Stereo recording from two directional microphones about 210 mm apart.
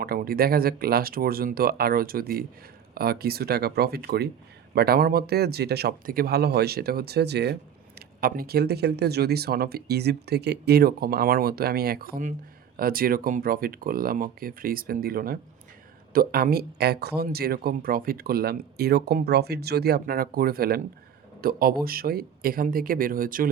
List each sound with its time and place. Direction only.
0.0 s speech: 45° right (ahead or behind)